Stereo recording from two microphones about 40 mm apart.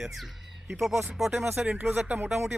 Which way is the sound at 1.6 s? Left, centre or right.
Right.